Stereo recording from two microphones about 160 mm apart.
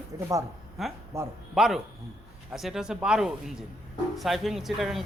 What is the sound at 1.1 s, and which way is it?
Speech, 20° right (ahead or behind).